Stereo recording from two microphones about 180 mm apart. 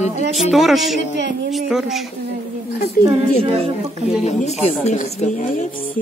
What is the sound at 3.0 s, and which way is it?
Speech, 50° left (ahead or behind).